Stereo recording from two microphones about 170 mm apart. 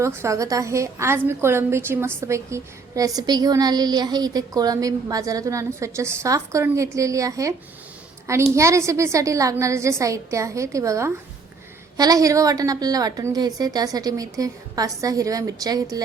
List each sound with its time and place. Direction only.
0.0 s a woman's voice: 15° right (ahead or behind)